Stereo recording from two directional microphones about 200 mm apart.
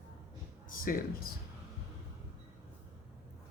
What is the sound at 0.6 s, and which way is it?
Speech, 45° left (ahead or behind).